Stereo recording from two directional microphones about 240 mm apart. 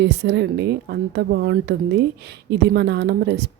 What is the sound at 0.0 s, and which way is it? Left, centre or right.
A woman's voice, right.